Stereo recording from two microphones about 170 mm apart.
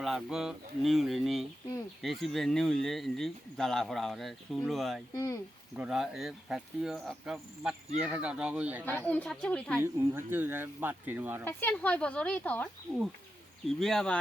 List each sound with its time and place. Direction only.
0.0 s speech: centre (ahead or behind)
5.1 s speech: 20° left (ahead or behind)
5.7 s speech: 5° right (ahead or behind)
8.8 s speech: 10° left (ahead or behind)
9.7 s speech: 15° right (ahead or behind)
11.4 s speech: 10° left (ahead or behind)